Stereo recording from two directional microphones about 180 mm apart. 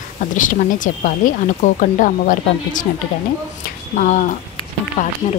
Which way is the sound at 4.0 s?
45° left (ahead or behind).